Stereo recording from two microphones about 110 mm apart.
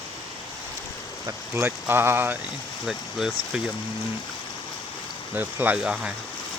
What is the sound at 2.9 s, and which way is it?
Speech, 5° right (ahead or behind).